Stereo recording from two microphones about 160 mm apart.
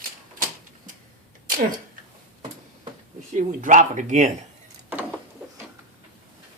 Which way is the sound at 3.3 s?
50° right (ahead or behind).